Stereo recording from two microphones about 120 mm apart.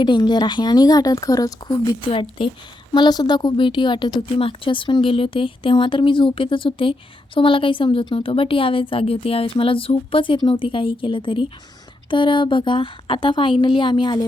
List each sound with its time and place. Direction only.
0.0 s speech: 40° left (ahead or behind)
2.4 s a woman's voice: 45° left (ahead or behind)